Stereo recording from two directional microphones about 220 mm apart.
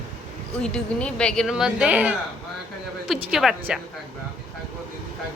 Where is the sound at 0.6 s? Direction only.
5° left (ahead or behind).